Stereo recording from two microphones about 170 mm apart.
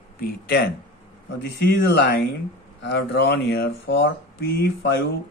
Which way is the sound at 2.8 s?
75° left (ahead or behind).